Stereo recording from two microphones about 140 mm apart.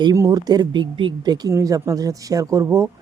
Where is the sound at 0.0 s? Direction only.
25° right (ahead or behind).